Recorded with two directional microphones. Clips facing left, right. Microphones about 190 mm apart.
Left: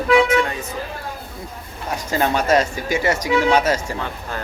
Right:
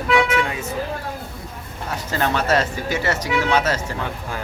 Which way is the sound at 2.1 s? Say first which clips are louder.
Left 3 dB; 15° left (ahead or behind).